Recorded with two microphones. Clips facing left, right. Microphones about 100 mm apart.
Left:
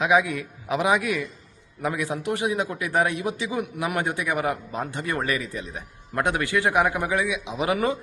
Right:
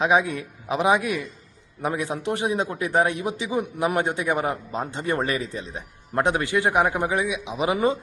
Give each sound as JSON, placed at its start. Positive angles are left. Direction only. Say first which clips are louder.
{"t": 0.0, "sound": "a man's voice", "louder": "even", "side_deg": -25}